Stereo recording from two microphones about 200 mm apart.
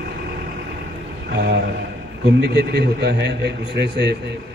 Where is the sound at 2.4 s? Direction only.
55° right (ahead or behind).